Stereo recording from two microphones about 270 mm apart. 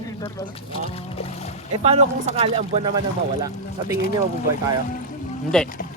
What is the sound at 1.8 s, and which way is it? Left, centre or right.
Speech, right.